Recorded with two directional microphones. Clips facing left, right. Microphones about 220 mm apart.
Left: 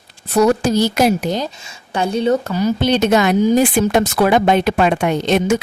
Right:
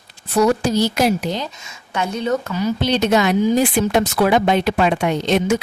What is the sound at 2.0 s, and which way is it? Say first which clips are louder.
Speech: left 4 dB; 30° left (ahead or behind).